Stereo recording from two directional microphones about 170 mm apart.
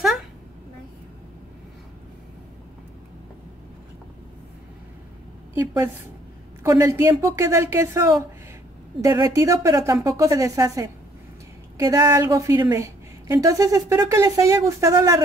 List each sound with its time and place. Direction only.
5.5 s a woman's voice: 15° right (ahead or behind)